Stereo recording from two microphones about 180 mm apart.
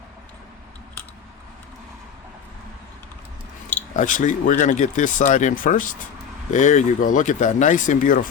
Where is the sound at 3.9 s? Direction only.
45° left (ahead or behind).